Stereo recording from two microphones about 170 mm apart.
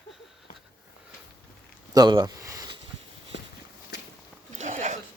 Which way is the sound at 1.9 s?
25° right (ahead or behind).